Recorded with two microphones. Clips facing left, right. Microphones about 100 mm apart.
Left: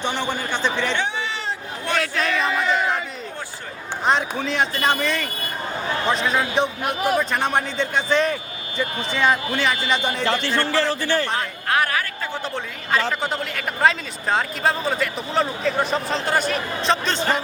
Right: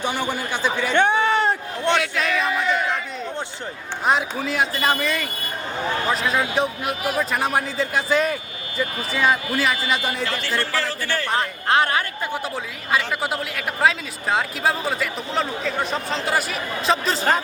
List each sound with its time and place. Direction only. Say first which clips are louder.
0.0 s a man's voice: even; 10° right (ahead or behind)
0.9 s a sound: right 8 dB; 55° right (ahead or behind)
2.0 s speech: even; centre (ahead or behind)
4.0 s speech: even; 5° right (ahead or behind)
10.2 s a man's voice: left 4 dB; 25° left (ahead or behind)
11.3 s speech: right 2 dB; 25° right (ahead or behind)
12.3 s a man's voice: right 1 dB; 5° right (ahead or behind)